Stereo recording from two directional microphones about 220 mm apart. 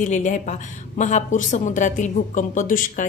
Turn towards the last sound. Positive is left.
turn(degrees=35)  # may be behind; listen again after turning